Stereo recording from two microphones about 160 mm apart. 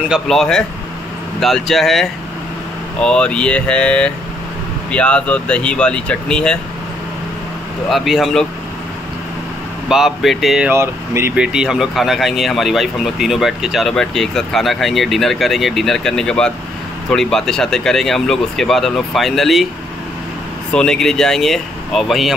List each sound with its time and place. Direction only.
0.1 s speech: centre (ahead or behind)
7.9 s speech: centre (ahead or behind)
9.8 s speech: centre (ahead or behind)
10.7 s speech: 15° right (ahead or behind)
20.7 s speech: 5° left (ahead or behind)